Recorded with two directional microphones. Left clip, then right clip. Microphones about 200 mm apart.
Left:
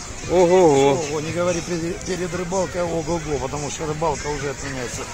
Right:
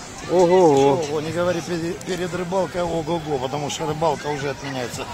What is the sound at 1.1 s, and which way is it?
Speech, 25° left (ahead or behind).